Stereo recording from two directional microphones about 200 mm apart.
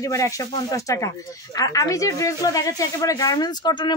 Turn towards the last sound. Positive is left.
turn(degrees=20)  # may be behind; listen again after turning